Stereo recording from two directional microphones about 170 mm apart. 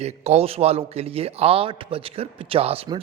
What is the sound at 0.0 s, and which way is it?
A man's voice, 40° right (ahead or behind).